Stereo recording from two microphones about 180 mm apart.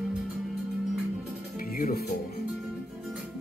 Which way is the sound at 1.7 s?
55° left (ahead or behind).